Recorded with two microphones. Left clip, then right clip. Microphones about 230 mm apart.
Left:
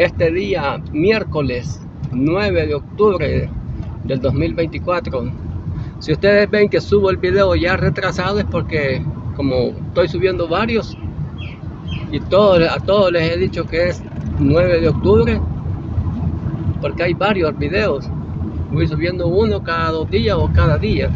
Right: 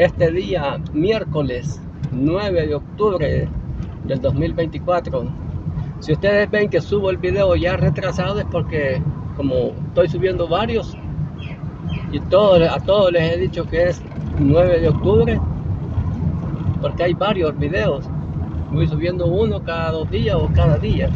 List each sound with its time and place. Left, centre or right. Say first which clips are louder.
0.0 s speech: left 1 dB; left
6.2 s speech: left 4 dB; centre
9.9 s speech: left 1 dB; centre
12.1 s speech: left 1 dB; centre
16.8 s speech: left 1 dB; centre